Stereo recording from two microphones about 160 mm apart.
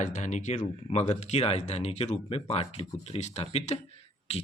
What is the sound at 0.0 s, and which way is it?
Speech, 50° left (ahead or behind).